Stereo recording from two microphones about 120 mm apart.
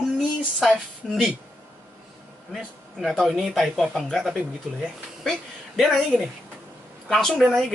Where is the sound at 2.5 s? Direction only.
Centre (ahead or behind).